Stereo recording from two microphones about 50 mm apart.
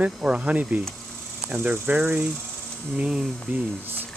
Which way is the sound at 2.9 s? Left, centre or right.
Centre.